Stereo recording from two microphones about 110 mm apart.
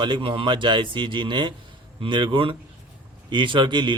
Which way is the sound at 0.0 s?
50° right (ahead or behind).